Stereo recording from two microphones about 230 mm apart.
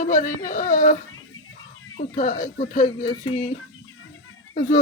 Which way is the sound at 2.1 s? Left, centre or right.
Left.